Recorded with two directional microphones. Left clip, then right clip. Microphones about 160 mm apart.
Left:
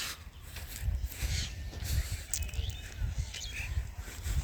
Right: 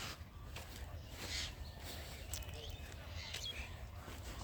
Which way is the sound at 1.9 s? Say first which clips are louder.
Left 9 dB; 10° right (ahead or behind).